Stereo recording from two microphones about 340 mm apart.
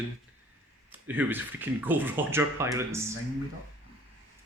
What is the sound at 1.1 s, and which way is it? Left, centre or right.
Speech, centre.